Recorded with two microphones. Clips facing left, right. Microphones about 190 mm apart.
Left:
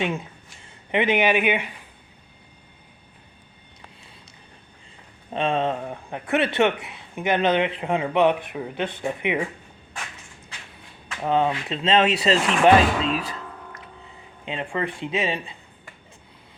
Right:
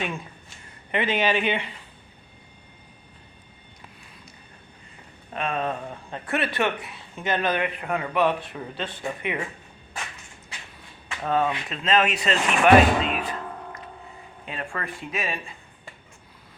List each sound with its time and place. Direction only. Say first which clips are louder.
0.0 s speech: left 5 dB; 20° left (ahead or behind)
5.3 s speech: left 4 dB; 30° left (ahead or behind)
11.2 s speech: left 2 dB; 20° left (ahead or behind)
14.4 s speech: left 6 dB; 20° left (ahead or behind)